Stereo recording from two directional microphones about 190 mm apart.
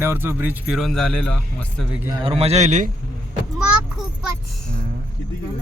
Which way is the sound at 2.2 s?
30° right (ahead or behind).